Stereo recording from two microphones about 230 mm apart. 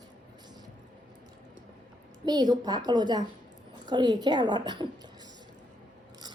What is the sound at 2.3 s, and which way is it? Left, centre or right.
A woman's voice, centre.